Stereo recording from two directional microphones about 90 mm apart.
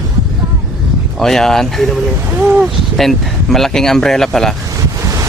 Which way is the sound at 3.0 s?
5° left (ahead or behind).